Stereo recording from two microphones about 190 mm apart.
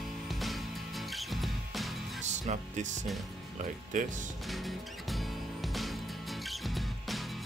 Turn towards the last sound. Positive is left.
turn(degrees=0)  # may be behind; listen again after turning